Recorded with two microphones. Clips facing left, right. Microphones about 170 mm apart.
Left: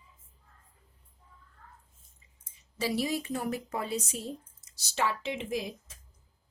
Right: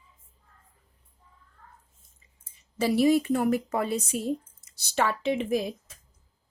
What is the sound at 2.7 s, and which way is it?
A woman's voice, 55° right (ahead or behind).